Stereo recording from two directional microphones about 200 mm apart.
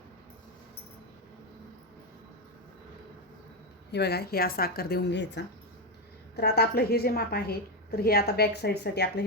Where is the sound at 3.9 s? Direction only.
55° left (ahead or behind).